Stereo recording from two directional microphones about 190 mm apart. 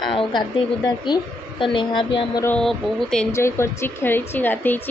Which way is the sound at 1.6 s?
25° left (ahead or behind).